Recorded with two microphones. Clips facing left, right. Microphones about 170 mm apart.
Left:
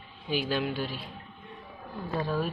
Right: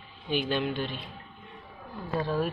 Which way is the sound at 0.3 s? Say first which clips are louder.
Right 1 dB; 5° left (ahead or behind).